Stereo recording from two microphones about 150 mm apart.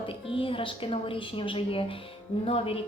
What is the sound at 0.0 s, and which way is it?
A woman's voice, 35° left (ahead or behind).